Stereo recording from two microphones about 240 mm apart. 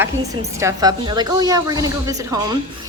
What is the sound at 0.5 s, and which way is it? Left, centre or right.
A woman's voice, centre.